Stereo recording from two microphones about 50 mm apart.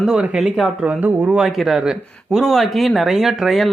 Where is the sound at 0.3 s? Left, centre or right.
Centre.